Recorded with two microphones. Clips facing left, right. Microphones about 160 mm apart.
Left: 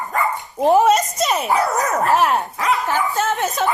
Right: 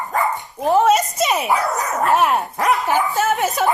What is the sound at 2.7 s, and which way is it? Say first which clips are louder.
Dog: right 2 dB; 15° right (ahead or behind).